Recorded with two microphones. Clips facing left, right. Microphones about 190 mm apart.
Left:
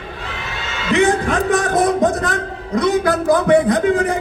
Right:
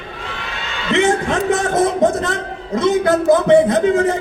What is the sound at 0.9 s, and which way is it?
A man's voice, 25° right (ahead or behind).